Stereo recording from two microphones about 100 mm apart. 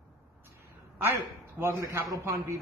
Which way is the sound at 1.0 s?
20° right (ahead or behind).